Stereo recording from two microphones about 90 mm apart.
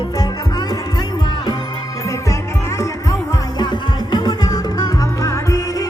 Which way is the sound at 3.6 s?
55° left (ahead or behind).